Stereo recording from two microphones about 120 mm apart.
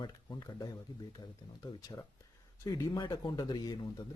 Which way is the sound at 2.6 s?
30° left (ahead or behind).